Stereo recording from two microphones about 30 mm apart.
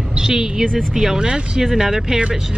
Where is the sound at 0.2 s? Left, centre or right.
Right.